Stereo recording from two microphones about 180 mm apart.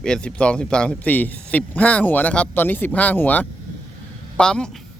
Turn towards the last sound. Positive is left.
turn(degrees=5)  # may be behind; listen again after turning